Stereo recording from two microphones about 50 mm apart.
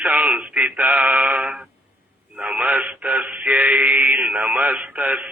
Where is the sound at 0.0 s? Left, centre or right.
Right.